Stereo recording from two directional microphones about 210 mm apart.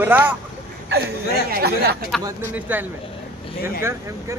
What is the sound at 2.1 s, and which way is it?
Speech, 10° right (ahead or behind).